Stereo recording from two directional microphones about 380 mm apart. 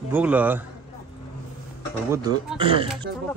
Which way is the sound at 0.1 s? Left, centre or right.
Centre.